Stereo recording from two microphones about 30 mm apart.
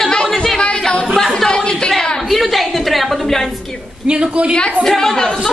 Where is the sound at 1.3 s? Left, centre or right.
Centre.